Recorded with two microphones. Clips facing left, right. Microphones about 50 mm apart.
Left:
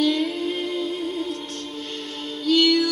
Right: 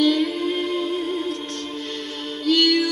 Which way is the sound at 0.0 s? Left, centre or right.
Right.